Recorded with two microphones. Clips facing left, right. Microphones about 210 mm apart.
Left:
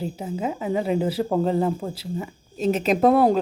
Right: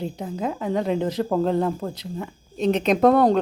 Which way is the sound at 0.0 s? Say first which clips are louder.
Even; 5° left (ahead or behind).